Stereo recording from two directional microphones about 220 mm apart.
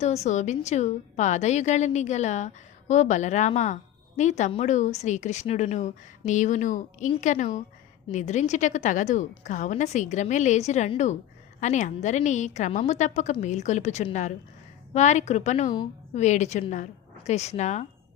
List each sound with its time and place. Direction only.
0.0 s a woman's voice: 30° left (ahead or behind)